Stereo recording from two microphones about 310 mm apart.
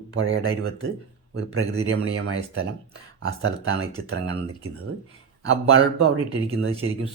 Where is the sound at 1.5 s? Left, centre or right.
Right.